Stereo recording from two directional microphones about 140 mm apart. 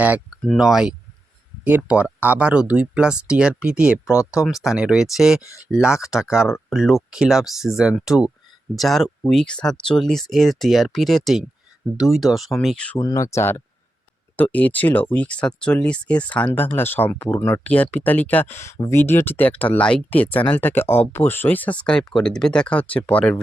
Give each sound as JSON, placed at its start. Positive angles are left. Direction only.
{"t": 0.4, "sound": "speech", "side_deg": -5}
{"t": 13.0, "sound": "speech", "side_deg": 25}